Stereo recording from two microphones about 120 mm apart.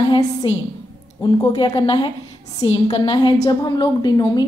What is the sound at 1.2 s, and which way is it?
A woman's voice, 35° left (ahead or behind).